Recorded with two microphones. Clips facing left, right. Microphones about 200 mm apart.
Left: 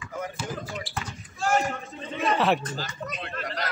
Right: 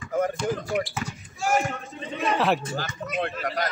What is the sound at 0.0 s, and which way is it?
Basketball bounce, 45° right (ahead or behind).